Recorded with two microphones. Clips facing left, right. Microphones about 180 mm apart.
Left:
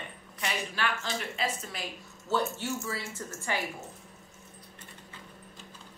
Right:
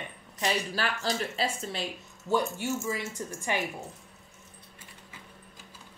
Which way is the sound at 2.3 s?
15° right (ahead or behind).